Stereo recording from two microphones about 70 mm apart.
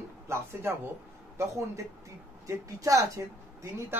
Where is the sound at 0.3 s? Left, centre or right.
Right.